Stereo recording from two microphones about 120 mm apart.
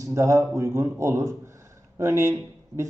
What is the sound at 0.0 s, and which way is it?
Speech, 25° right (ahead or behind).